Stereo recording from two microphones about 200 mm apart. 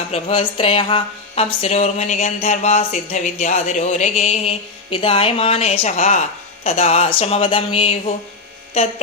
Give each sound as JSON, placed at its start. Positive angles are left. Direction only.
{"t": 0.1, "sound": "speech", "side_deg": 30}